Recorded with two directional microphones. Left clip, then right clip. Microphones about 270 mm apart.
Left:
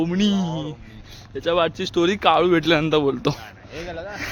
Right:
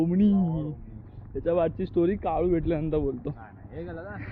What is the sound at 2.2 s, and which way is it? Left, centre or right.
Speech, left.